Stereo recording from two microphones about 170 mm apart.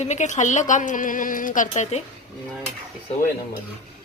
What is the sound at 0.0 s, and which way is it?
A woman's voice, 45° left (ahead or behind).